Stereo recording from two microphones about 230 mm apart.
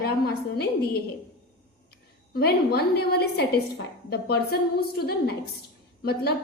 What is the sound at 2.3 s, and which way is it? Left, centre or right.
A woman's voice, left.